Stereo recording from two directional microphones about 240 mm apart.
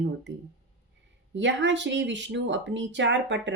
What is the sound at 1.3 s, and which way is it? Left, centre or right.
Speech, right.